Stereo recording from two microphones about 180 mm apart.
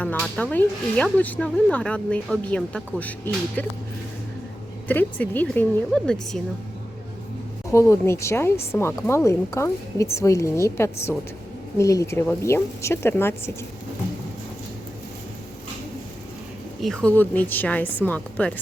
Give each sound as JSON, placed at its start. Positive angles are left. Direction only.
{"t": 0.0, "sound": "speech", "side_deg": 5}
{"t": 4.9, "sound": "speech", "side_deg": 10}
{"t": 7.7, "sound": "speech", "side_deg": 15}
{"t": 16.8, "sound": "speech", "side_deg": 5}